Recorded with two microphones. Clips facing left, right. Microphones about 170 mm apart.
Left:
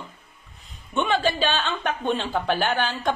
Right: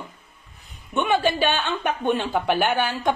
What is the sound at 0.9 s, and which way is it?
Speech, 10° right (ahead or behind).